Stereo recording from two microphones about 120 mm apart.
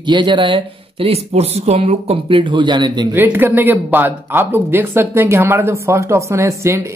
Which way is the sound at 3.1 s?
15° right (ahead or behind).